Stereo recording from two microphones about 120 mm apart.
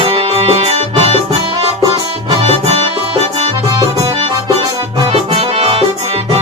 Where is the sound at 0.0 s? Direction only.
50° right (ahead or behind).